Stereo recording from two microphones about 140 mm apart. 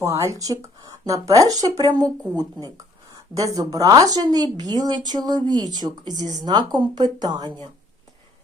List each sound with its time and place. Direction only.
0.0 s speech: 20° right (ahead or behind)